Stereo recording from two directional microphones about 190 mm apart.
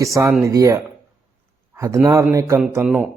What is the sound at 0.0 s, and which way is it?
Speech, 15° right (ahead or behind).